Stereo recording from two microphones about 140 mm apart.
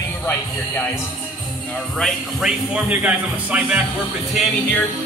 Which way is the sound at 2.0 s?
5° right (ahead or behind).